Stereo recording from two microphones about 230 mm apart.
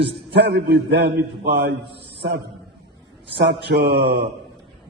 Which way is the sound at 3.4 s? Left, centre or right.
Right.